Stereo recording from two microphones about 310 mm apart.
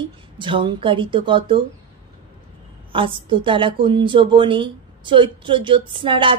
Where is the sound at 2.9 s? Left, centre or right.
Centre.